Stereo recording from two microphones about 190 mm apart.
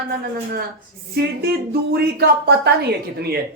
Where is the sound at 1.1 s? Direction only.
55° right (ahead or behind).